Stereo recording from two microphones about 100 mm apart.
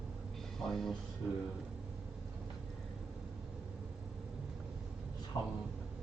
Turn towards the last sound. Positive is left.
turn(degrees=35)  # may be behind; listen again after turning